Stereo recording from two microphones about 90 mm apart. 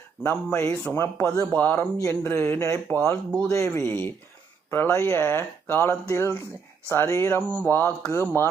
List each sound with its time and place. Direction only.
0.2 s speech: 25° left (ahead or behind)
3.1 s speech: 10° left (ahead or behind)
3.5 s speech: 30° left (ahead or behind)